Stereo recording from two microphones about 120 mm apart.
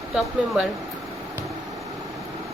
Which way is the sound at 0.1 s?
5° right (ahead or behind).